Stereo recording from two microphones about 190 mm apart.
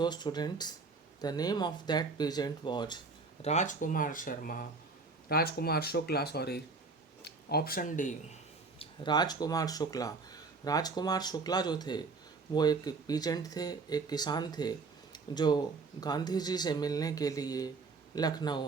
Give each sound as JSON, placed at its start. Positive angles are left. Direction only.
{"t": 0.0, "sound": "speech", "side_deg": 20}
{"t": 3.4, "sound": "speech", "side_deg": 40}
{"t": 8.8, "sound": "speech", "side_deg": 20}